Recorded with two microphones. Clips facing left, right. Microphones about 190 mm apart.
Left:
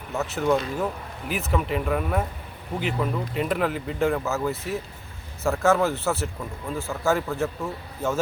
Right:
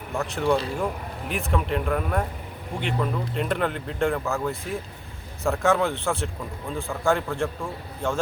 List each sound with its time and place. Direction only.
0.1 s speech: 5° left (ahead or behind)
0.4 s speech: 30° right (ahead or behind)
1.3 s speech: centre (ahead or behind)